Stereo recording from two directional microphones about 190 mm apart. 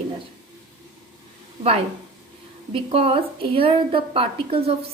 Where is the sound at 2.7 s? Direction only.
30° right (ahead or behind).